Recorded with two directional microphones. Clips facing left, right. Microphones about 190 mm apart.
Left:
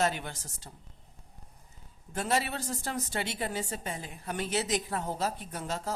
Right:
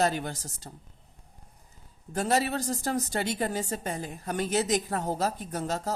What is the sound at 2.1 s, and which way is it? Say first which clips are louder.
A woman's voice: right 4 dB; 40° right (ahead or behind).